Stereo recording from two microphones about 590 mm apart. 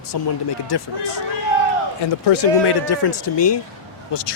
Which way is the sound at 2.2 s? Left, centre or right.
Left.